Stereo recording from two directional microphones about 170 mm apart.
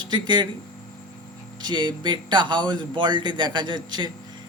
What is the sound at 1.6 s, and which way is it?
Speech, 25° right (ahead or behind).